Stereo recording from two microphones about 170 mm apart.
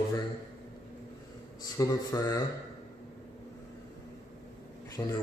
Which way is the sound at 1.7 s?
20° left (ahead or behind).